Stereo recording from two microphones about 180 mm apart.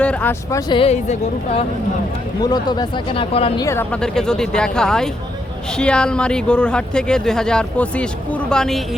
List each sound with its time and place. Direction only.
0.0 s speech: 10° left (ahead or behind)
0.7 s a woman's voice: 35° left (ahead or behind)
2.4 s speech: 20° left (ahead or behind)
3.6 s speech: 15° left (ahead or behind)